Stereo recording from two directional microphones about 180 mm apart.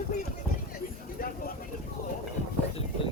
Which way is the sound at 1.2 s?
50° left (ahead or behind).